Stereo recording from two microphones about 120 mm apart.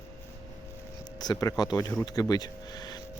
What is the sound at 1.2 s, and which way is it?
Speech, 35° left (ahead or behind).